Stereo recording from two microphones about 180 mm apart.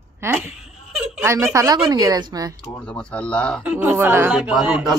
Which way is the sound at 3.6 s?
10° right (ahead or behind).